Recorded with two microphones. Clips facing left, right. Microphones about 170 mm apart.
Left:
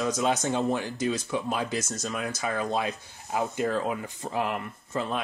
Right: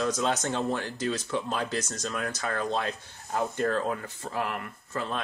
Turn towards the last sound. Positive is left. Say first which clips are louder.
# left 3 dB
turn(degrees=20)  # may be behind; listen again after turning